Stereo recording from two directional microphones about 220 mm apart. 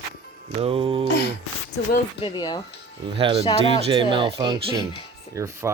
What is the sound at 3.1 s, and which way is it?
Speech, 25° right (ahead or behind).